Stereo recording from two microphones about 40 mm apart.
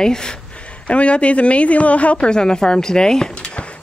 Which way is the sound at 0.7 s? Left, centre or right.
Left.